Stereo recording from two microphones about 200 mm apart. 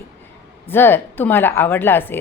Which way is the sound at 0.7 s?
10° left (ahead or behind).